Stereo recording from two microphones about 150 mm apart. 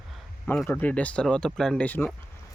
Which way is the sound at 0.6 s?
15° left (ahead or behind).